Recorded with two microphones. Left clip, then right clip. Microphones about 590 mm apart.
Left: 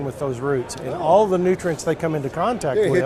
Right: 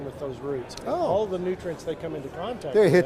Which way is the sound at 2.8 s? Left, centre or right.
Right.